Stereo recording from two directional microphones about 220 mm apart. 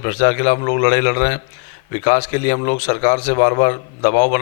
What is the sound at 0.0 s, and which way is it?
A man's voice, 15° left (ahead or behind).